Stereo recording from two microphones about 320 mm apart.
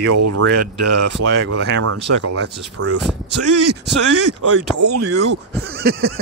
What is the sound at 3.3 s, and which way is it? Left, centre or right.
Speech, right.